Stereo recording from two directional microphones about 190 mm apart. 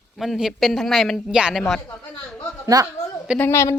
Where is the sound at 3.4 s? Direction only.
15° left (ahead or behind).